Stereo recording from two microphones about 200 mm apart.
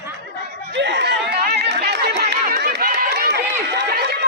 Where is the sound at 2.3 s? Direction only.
50° right (ahead or behind).